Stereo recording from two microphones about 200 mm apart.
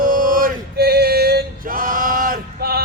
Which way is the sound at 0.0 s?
45° right (ahead or behind).